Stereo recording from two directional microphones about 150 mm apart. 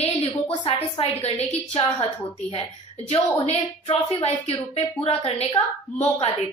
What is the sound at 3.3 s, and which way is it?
A woman's voice, 40° left (ahead or behind).